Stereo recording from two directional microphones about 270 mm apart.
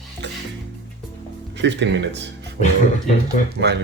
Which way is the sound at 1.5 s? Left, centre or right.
Right.